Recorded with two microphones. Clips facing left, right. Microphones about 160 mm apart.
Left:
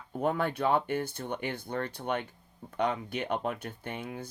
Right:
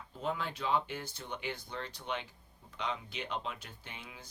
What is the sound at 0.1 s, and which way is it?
Speech, 55° left (ahead or behind).